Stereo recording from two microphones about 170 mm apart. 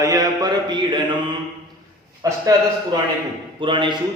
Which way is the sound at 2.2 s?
20° right (ahead or behind).